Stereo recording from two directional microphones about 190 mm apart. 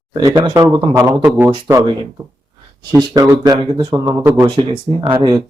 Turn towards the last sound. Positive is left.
turn(degrees=-25)  # may be behind; listen again after turning